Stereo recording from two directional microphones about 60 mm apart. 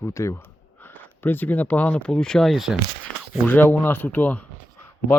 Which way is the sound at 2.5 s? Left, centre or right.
Centre.